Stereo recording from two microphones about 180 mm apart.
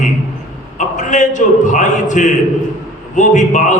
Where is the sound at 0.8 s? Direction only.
45° left (ahead or behind).